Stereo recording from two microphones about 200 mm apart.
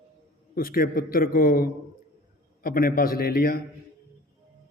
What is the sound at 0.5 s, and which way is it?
A man's voice, 45° left (ahead or behind).